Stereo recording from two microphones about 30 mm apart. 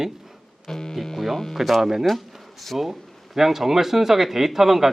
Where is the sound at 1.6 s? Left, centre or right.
Centre.